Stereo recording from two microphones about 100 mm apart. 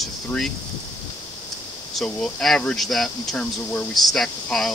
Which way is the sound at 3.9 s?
Centre (ahead or behind).